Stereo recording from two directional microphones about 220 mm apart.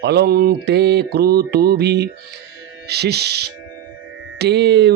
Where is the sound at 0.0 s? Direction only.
45° right (ahead or behind).